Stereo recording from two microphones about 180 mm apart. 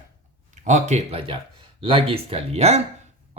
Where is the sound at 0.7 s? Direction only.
40° right (ahead or behind).